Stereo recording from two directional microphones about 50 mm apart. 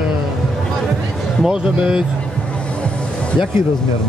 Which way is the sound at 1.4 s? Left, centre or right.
Centre.